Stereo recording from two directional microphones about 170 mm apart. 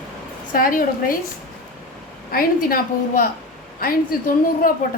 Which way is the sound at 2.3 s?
55° left (ahead or behind).